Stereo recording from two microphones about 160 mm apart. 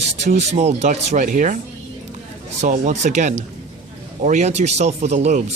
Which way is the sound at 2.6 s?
45° right (ahead or behind).